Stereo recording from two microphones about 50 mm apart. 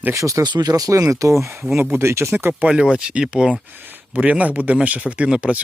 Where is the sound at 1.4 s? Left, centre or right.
Right.